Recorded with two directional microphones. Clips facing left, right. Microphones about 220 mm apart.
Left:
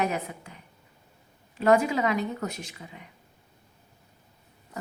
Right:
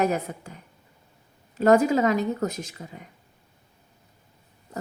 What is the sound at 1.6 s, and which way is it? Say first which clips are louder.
A woman's voice: right 4 dB; 40° right (ahead or behind).